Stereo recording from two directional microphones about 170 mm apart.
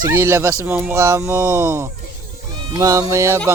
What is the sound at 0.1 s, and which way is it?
Speech, 15° right (ahead or behind).